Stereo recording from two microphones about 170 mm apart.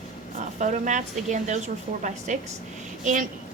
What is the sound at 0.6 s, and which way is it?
A woman's voice, 45° right (ahead or behind).